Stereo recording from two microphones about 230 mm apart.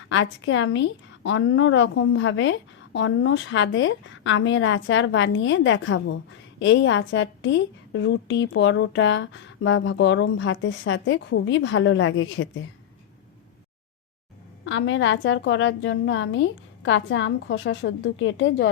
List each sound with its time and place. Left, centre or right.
0.1 s a woman's voice: left
14.6 s a woman's voice: left